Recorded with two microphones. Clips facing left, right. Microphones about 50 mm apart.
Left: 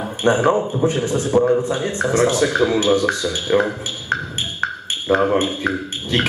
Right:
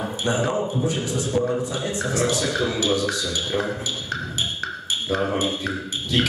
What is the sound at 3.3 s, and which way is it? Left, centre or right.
Music, left.